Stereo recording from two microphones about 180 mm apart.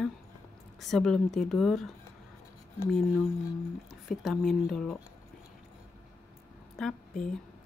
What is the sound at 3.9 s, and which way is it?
Speech, centre (ahead or behind).